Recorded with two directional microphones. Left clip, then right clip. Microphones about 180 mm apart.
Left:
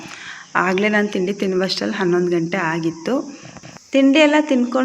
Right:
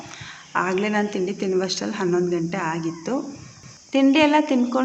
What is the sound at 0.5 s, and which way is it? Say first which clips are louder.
Speech: left 5 dB; 25° left (ahead or behind).